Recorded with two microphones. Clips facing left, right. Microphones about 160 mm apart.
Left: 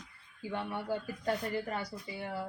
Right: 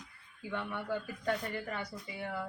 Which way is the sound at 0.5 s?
35° left (ahead or behind).